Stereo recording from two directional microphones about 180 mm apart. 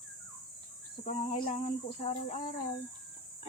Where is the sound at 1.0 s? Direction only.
35° left (ahead or behind).